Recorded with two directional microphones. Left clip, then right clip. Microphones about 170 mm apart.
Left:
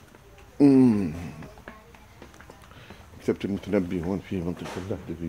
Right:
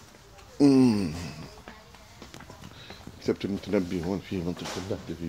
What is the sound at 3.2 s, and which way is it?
Speech, 25° left (ahead or behind).